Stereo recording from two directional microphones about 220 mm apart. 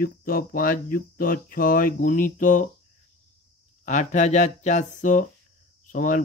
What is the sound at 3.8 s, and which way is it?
A man's voice, 35° left (ahead or behind).